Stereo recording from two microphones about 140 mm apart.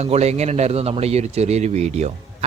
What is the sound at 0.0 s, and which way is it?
Speech, 50° right (ahead or behind).